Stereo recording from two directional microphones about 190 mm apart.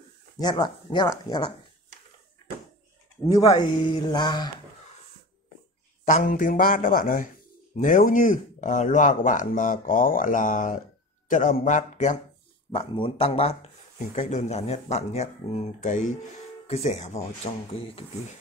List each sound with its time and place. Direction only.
0.4 s speech: 20° left (ahead or behind)
3.3 s speech: 20° left (ahead or behind)
6.0 s a man's voice: 45° left (ahead or behind)
12.7 s speech: 25° left (ahead or behind)